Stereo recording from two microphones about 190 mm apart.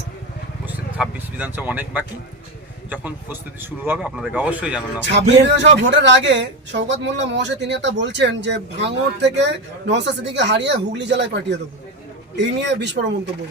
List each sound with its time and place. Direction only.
0.6 s vehicle: 10° right (ahead or behind)
3.8 s speech: 5° right (ahead or behind)
5.1 s speech: 65° right (ahead or behind)